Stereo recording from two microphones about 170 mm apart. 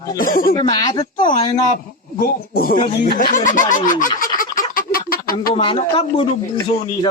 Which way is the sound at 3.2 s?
50° left (ahead or behind).